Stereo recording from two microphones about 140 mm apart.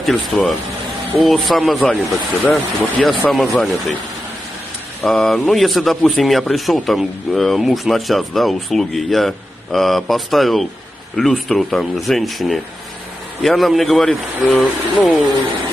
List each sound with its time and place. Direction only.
0.0 s speech: centre (ahead or behind)
5.0 s speech: centre (ahead or behind)